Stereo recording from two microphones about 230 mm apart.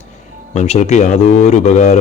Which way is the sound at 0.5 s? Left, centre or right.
Left.